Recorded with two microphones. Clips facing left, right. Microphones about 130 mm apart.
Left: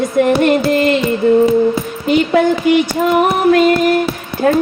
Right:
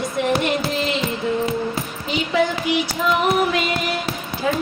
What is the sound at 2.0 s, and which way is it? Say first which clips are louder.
Music: left 9 dB; 55° left (ahead or behind).